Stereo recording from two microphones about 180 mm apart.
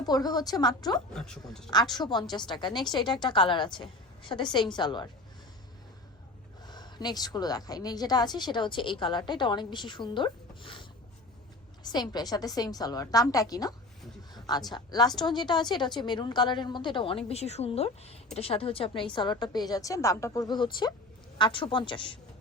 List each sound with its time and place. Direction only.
0.0 s a woman's voice: 20° left (ahead or behind)
1.1 s speech: 5° left (ahead or behind)
1.7 s a woman's voice: 25° left (ahead or behind)
6.7 s a woman's voice: 25° left (ahead or behind)